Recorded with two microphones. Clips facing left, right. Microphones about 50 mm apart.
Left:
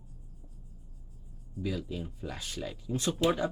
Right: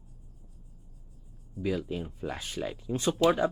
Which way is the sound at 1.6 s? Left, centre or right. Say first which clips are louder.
Right 4 dB; right.